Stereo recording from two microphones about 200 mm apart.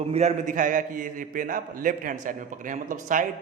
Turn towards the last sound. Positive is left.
turn(degrees=-40)  # may be behind; listen again after turning